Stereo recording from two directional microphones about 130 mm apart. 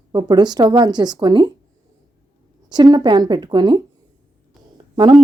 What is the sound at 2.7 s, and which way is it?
A woman's voice, 35° right (ahead or behind).